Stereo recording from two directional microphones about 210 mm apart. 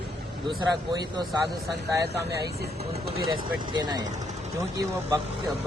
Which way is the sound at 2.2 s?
50° right (ahead or behind).